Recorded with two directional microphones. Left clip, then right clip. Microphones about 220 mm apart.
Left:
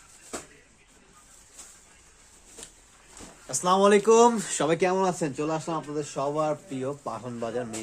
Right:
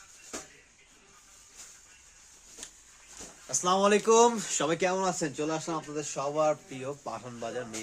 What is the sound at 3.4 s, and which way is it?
Speech, 10° left (ahead or behind).